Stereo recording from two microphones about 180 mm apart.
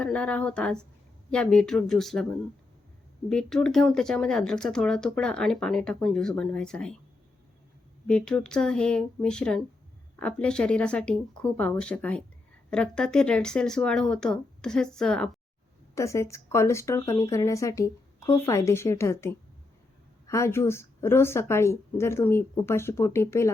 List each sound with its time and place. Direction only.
0.0 s speech: 5° left (ahead or behind)
8.0 s speech: 5° left (ahead or behind)
16.0 s speech: 15° left (ahead or behind)